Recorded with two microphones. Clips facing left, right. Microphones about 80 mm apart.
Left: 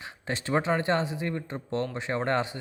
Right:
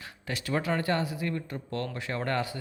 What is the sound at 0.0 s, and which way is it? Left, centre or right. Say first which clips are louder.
Speech: left 3 dB; left.